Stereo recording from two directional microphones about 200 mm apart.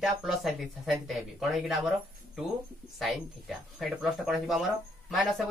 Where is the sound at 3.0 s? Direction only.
Centre (ahead or behind).